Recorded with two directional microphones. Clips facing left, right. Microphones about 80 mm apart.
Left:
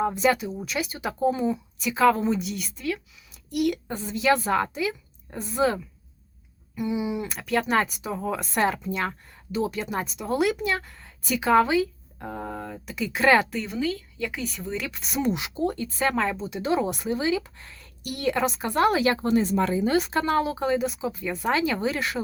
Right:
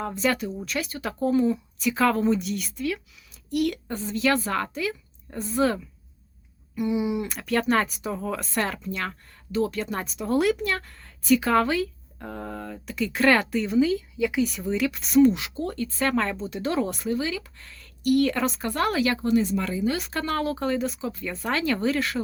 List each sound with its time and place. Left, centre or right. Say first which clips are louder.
0.0 s a woman's voice: left 3 dB; centre
15.2 s a woman's voice: right 5 dB; centre
18.3 s a woman's voice: left 2 dB; centre
18.9 s speech: even; left
20.1 s a woman's voice: left 4 dB; centre
20.4 s a woman's voice: left 1 dB; centre